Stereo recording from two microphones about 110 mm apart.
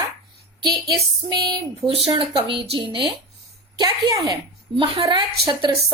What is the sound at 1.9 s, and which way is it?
A woman's voice, 55° right (ahead or behind).